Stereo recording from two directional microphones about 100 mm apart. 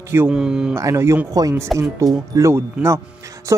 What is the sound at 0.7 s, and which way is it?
Speech, 30° right (ahead or behind).